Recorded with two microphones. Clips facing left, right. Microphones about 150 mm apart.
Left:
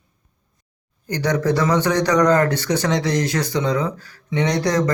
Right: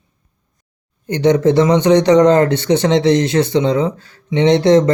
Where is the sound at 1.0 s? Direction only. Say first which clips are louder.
Right 7 dB; 20° right (ahead or behind).